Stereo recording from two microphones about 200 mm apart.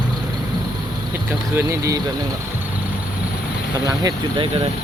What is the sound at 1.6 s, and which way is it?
Speech, 15° right (ahead or behind).